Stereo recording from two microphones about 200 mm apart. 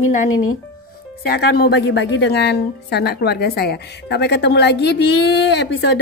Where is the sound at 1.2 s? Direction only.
50° left (ahead or behind).